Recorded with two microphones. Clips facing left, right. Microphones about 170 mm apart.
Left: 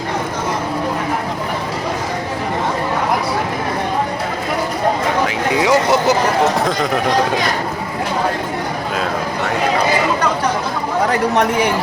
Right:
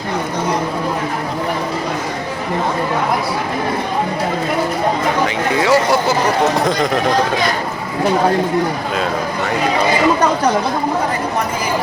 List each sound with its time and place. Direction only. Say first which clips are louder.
5.6 s speech: left 1 dB; 20° left (ahead or behind)
11.1 s speech: left 4 dB; 70° left (ahead or behind)